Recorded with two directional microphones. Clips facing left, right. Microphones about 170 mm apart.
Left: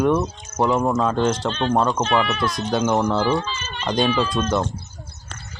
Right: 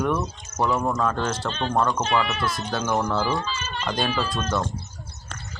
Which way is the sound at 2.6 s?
20° left (ahead or behind).